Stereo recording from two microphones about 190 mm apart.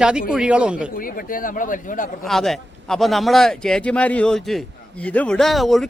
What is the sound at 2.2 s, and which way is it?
A man's voice, centre (ahead or behind).